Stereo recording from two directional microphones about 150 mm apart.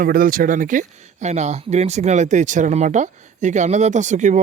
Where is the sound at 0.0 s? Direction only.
70° right (ahead or behind).